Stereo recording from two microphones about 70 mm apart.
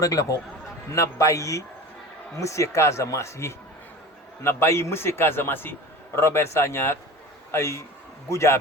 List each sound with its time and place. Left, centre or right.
0.0 s a man's voice: left